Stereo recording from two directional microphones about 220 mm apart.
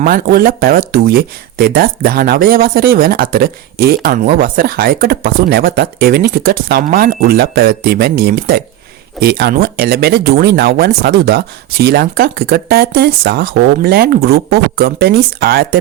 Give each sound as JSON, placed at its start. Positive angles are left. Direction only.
{"t": 0.0, "sound": "speech", "side_deg": -40}